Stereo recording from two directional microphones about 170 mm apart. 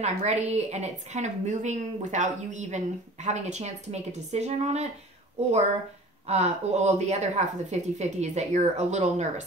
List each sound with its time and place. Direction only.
0.0 s a woman's voice: 40° right (ahead or behind)
6.2 s a woman's voice: 40° right (ahead or behind)